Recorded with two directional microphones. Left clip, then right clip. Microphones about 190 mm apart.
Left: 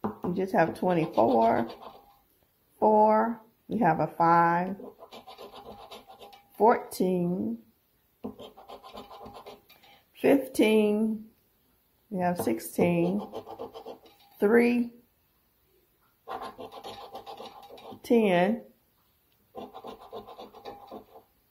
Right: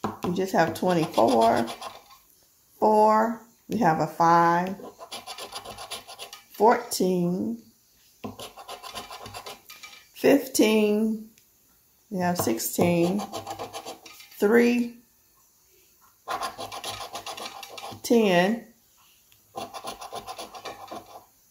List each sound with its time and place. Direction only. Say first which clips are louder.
0.3 s speech: right 2 dB; 20° left (ahead or behind)
2.8 s speech: right 2 dB; 20° left (ahead or behind)
6.5 s speech: right 2 dB; 25° left (ahead or behind)
10.1 s speech: right 3 dB; 20° left (ahead or behind)
12.1 s speech: right 2 dB; 20° left (ahead or behind)
14.4 s speech: right 2 dB; 20° left (ahead or behind)
18.0 s speech: right 3 dB; 20° left (ahead or behind)